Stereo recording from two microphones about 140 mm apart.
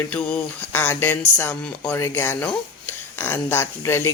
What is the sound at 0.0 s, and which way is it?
Speech, 10° left (ahead or behind).